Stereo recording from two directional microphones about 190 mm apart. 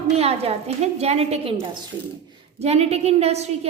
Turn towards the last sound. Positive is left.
turn(degrees=-35)  # may be behind; listen again after turning